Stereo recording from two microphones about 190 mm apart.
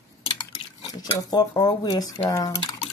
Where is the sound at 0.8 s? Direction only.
25° left (ahead or behind).